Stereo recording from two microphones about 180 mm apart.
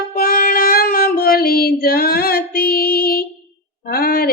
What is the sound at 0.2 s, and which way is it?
Child singing, 55° left (ahead or behind).